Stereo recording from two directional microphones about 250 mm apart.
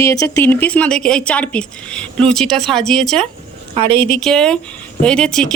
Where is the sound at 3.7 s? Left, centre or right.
Right.